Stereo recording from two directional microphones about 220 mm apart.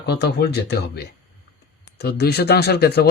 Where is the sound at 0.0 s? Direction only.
50° left (ahead or behind).